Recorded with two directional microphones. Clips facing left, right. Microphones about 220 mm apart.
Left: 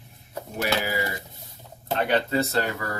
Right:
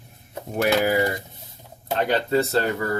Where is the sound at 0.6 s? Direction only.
55° right (ahead or behind).